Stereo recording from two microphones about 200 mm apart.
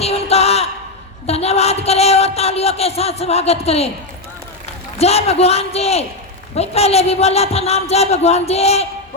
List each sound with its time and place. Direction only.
0.0 s a sound: 30° left (ahead or behind)
1.3 s speech: 30° left (ahead or behind)
4.9 s speech: 30° left (ahead or behind)